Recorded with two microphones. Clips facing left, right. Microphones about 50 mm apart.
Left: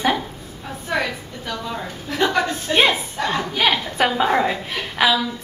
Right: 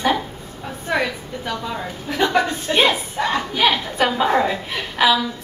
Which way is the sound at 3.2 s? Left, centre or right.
Centre.